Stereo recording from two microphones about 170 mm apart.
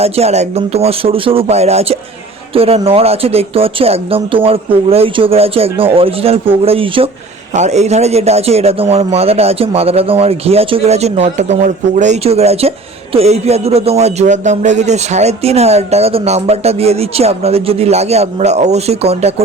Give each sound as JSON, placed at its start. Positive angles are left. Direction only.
{"t": 0.0, "sound": "a man's voice", "side_deg": -40}
{"t": 7.5, "sound": "a man's voice", "side_deg": -40}